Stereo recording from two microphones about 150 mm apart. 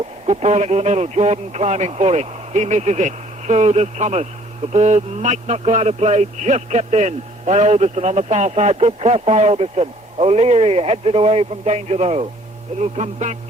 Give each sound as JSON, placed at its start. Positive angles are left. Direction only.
{"t": 0.3, "sound": "a man's voice", "side_deg": -45}